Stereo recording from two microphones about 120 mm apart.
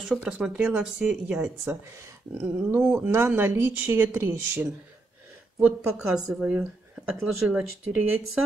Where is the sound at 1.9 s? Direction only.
25° right (ahead or behind).